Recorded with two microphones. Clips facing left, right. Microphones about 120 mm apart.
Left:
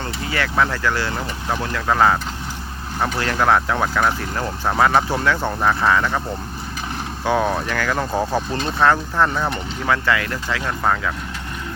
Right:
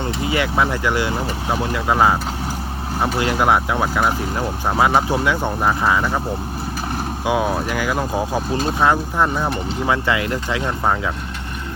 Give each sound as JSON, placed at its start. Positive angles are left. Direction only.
{"t": 0.0, "sound": "speech", "side_deg": -20}
{"t": 7.3, "sound": "speech", "side_deg": -10}